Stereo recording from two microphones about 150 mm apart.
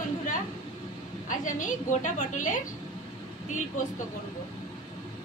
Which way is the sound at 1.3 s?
60° left (ahead or behind).